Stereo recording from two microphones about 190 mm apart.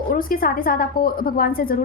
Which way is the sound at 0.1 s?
50° left (ahead or behind).